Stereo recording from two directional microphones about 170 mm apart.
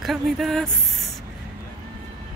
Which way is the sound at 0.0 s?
Centre (ahead or behind).